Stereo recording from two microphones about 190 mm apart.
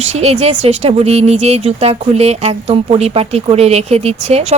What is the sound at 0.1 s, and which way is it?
Speech, 35° right (ahead or behind).